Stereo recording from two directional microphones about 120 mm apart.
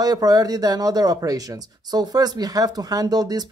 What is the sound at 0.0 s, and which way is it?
Speech, 30° right (ahead or behind).